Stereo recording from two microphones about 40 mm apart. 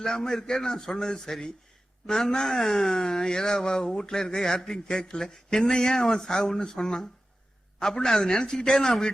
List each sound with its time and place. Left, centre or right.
0.0 s speech: centre